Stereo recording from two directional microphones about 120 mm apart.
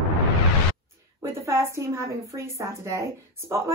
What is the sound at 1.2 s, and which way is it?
A woman's voice, 25° right (ahead or behind).